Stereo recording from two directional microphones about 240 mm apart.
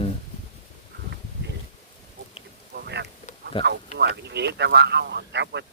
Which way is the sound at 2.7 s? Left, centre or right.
Right.